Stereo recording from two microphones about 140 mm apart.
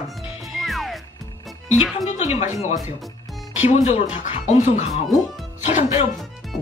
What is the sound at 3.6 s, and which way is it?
Speech, 55° left (ahead or behind).